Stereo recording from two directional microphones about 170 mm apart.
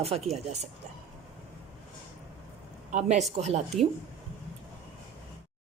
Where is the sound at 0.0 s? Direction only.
35° right (ahead or behind).